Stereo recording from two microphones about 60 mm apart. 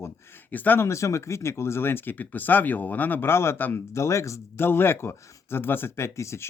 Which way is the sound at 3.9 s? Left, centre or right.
Left.